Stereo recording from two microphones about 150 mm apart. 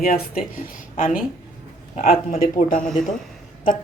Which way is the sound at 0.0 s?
75° left (ahead or behind).